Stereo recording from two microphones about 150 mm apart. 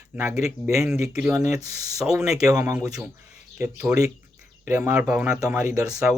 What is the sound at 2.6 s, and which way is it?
Speech, 20° right (ahead or behind).